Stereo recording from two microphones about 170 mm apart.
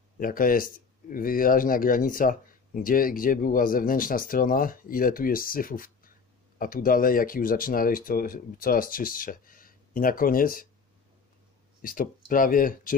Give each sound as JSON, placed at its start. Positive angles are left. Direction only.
{"t": 0.2, "sound": "speech", "side_deg": 55}
{"t": 11.8, "sound": "speech", "side_deg": 55}